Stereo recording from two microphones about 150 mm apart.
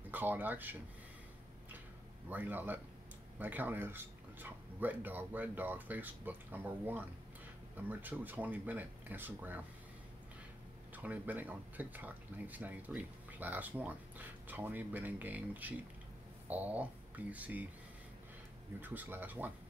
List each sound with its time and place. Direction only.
0.1 s speech: 10° right (ahead or behind)
2.2 s speech: 10° right (ahead or behind)
11.0 s speech: 10° right (ahead or behind)
18.8 s speech: 10° right (ahead or behind)